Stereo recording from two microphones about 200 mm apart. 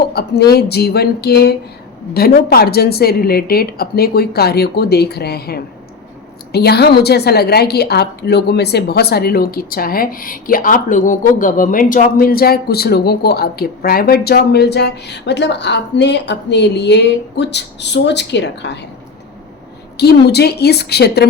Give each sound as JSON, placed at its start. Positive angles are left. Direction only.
{"t": 0.1, "sound": "a woman's voice", "side_deg": 55}
{"t": 20.0, "sound": "a woman's voice", "side_deg": 55}